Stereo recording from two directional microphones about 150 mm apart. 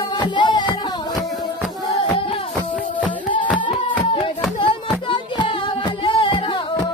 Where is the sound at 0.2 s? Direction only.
30° left (ahead or behind).